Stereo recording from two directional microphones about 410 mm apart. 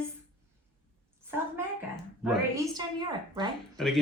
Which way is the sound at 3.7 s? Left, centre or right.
Centre.